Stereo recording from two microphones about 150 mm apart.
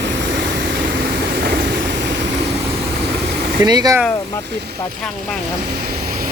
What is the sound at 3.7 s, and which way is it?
Speech, 25° right (ahead or behind).